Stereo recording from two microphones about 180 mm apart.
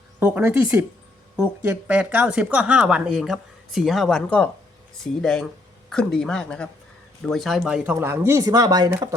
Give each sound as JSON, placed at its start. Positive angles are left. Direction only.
{"t": 0.2, "sound": "speech", "side_deg": -10}
{"t": 7.9, "sound": "speech", "side_deg": -10}